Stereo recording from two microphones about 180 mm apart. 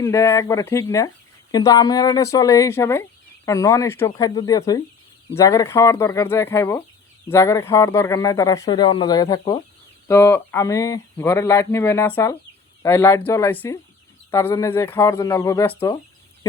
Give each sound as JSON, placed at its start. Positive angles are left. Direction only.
{"t": 0.0, "sound": "speech", "side_deg": 15}